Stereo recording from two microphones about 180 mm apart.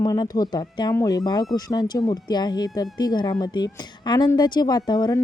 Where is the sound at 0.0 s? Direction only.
20° left (ahead or behind).